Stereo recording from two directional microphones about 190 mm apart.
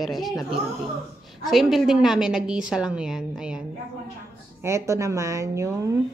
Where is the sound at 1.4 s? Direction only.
Centre (ahead or behind).